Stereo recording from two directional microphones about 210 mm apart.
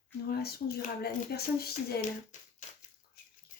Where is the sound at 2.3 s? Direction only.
35° left (ahead or behind).